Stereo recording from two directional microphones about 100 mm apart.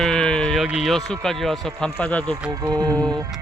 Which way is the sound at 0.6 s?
Centre (ahead or behind).